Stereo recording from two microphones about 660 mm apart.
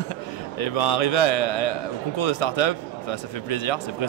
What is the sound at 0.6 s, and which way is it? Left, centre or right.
Speech, left.